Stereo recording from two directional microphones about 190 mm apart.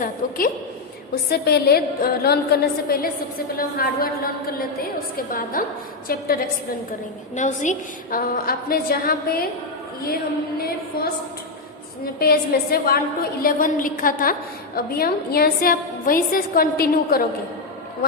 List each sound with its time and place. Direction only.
0.0 s a woman's voice: 50° left (ahead or behind)
7.3 s a woman's voice: 40° left (ahead or behind)
12.2 s a woman's voice: 50° left (ahead or behind)